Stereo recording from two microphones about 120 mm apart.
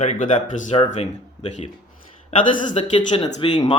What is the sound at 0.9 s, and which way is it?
Speech, 70° left (ahead or behind).